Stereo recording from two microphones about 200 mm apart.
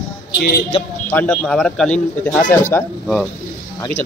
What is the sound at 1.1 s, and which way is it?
Speech, 5° left (ahead or behind).